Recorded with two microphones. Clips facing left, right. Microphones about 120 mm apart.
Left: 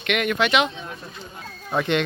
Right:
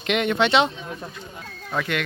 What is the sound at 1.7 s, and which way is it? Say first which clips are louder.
Speech: left 4 dB; 25° left (ahead or behind).